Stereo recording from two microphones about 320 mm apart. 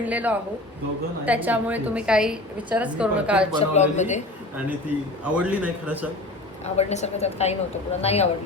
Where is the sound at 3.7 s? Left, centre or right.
Left.